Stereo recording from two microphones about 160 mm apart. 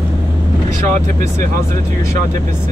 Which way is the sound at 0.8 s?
50° right (ahead or behind).